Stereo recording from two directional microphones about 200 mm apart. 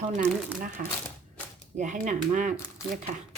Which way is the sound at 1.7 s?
40° right (ahead or behind).